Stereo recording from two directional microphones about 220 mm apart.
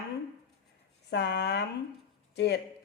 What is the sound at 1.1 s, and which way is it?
Speech, 50° left (ahead or behind).